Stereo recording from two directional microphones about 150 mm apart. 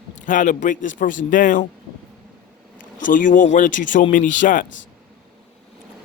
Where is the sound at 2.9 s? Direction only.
60° left (ahead or behind).